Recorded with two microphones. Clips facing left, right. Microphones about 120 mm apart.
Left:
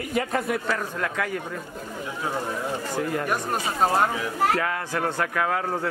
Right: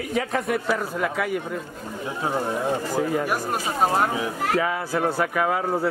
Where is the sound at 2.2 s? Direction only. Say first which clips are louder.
Right 4 dB; 25° right (ahead or behind).